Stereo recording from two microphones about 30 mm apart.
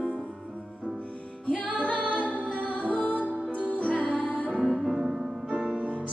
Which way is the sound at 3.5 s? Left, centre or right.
Right.